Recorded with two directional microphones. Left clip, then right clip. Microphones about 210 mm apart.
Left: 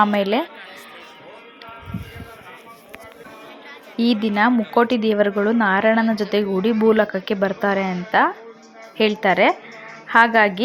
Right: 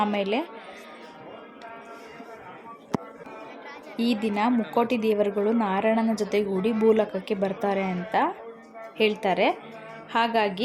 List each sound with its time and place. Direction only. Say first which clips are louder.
0.0 s a woman's voice: left 8 dB; 15° left (ahead or behind)
3.9 s a woman's voice: left 7 dB; 15° left (ahead or behind)